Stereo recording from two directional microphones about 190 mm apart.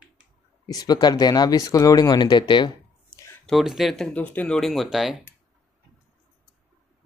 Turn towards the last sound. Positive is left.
turn(degrees=0)  # may be behind; listen again after turning